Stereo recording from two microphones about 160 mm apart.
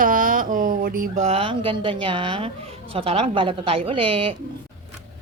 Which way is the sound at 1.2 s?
35° right (ahead or behind).